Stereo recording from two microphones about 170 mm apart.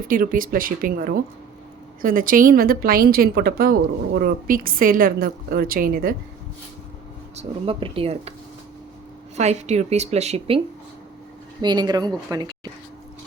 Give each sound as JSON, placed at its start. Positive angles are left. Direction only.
{"t": 0.0, "sound": "a woman's voice", "side_deg": -55}
{"t": 7.3, "sound": "a woman's voice", "side_deg": -35}
{"t": 9.3, "sound": "a woman's voice", "side_deg": -40}
{"t": 11.6, "sound": "speech", "side_deg": -25}